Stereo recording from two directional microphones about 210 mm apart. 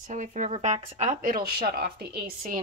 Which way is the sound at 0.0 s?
35° right (ahead or behind).